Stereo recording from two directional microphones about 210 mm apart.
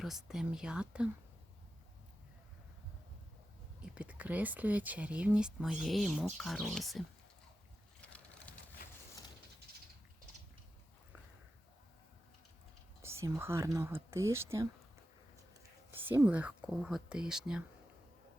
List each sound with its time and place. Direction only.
0.0 s speech: centre (ahead or behind)
3.9 s speech: 5° right (ahead or behind)
8.0 s sewing machine: 5° left (ahead or behind)
13.0 s speech: 10° right (ahead or behind)
15.9 s speech: 10° right (ahead or behind)